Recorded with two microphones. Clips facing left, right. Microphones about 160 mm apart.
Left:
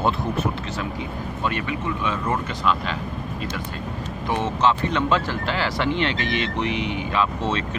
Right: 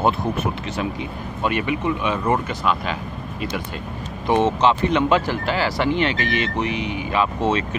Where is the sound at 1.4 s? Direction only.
15° right (ahead or behind).